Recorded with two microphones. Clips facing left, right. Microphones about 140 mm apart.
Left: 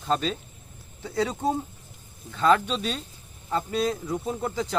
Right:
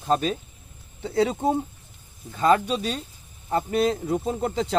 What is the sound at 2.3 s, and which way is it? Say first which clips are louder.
Speech: right 1 dB; 10° right (ahead or behind).